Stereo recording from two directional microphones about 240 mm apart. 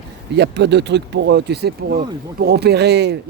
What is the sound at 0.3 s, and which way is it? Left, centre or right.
Speech, right.